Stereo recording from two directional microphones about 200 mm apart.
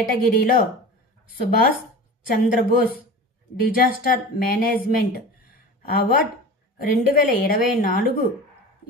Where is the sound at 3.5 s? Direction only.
50° left (ahead or behind).